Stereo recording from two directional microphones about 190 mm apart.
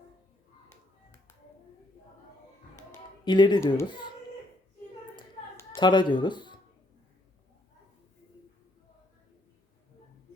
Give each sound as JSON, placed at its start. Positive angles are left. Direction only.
{"t": 3.2, "sound": "speech", "side_deg": 25}
{"t": 5.5, "sound": "speech", "side_deg": 20}